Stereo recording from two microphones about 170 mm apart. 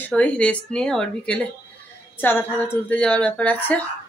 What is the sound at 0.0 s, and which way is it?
Speech, 5° left (ahead or behind).